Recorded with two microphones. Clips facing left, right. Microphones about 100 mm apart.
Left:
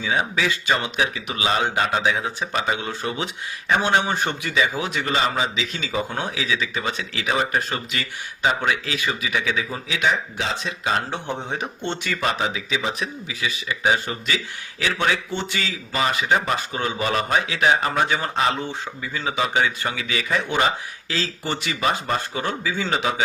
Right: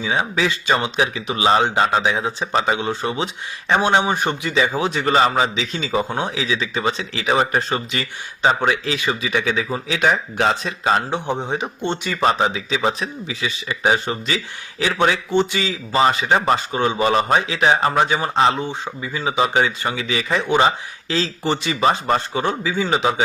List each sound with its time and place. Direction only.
0.0 s a man's voice: 20° right (ahead or behind)
4.5 s a man's voice: 30° right (ahead or behind)
5.7 s a man's voice: 25° right (ahead or behind)
11.1 s speech: 15° right (ahead or behind)
12.2 s a man's voice: 35° right (ahead or behind)
15.3 s a man's voice: 20° right (ahead or behind)